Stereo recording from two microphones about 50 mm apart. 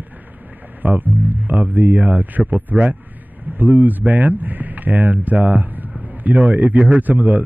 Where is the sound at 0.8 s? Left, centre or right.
Right.